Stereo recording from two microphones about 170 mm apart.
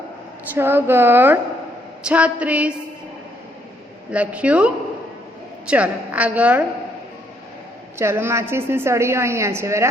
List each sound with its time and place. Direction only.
0.5 s a woman's voice: 10° right (ahead or behind)
4.1 s a woman's voice: 5° right (ahead or behind)
7.9 s a woman's voice: 15° right (ahead or behind)